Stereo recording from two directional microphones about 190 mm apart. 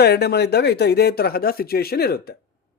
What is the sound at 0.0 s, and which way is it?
Speech, 60° left (ahead or behind).